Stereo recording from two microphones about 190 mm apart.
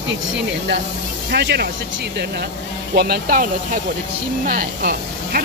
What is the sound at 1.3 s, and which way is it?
Speech, 60° right (ahead or behind).